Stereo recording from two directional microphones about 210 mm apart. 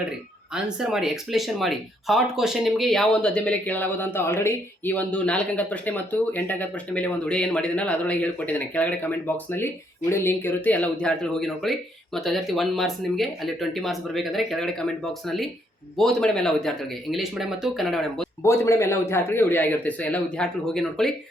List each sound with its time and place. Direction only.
0.5 s speech: centre (ahead or behind)
16.0 s speech: centre (ahead or behind)
18.4 s speech: 10° left (ahead or behind)